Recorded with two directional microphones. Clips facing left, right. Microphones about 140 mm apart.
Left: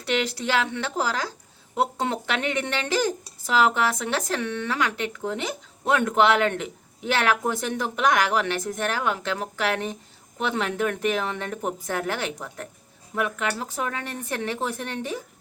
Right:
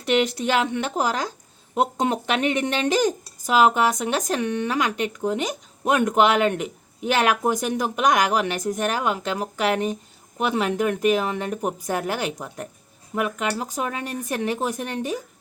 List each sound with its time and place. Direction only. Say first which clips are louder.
0.0 s speech: right 5 dB; 20° right (ahead or behind)